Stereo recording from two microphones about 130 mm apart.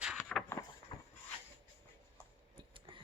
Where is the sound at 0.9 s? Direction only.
40° left (ahead or behind).